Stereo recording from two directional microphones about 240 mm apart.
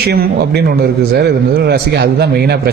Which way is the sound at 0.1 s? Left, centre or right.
Right.